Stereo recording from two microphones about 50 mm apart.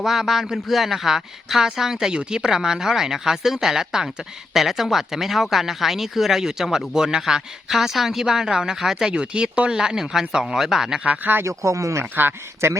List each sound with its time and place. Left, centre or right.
0.0 s a man's voice: centre
9.1 s a man's voice: right
11.0 s speech: right
11.4 s speech: right
12.6 s speech: right